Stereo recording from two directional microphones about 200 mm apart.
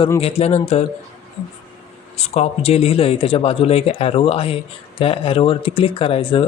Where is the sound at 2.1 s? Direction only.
30° left (ahead or behind).